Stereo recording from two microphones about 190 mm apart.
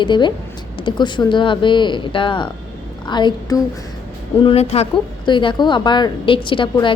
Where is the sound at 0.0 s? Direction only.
25° left (ahead or behind).